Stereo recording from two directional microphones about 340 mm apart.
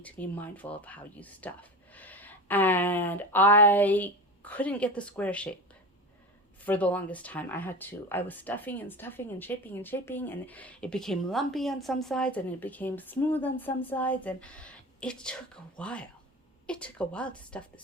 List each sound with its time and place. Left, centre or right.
0.0 s speech: centre
6.7 s speech: centre